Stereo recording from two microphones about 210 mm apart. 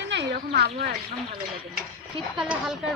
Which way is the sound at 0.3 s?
50° right (ahead or behind).